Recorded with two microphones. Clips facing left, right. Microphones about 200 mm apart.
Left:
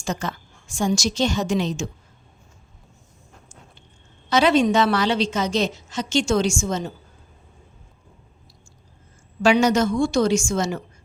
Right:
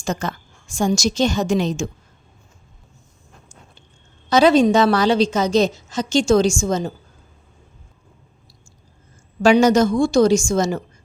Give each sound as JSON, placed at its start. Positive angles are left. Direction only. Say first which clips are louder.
{"t": 0.0, "sound": "a woman's voice", "louder": "right 3 dB", "side_deg": -45}
{"t": 4.3, "sound": "a woman's voice", "louder": "right 4 dB", "side_deg": -40}
{"t": 9.4, "sound": "a woman's voice", "louder": "right 4 dB", "side_deg": -40}